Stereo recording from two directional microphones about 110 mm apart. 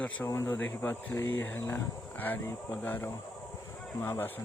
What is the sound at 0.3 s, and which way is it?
Speech, 25° left (ahead or behind).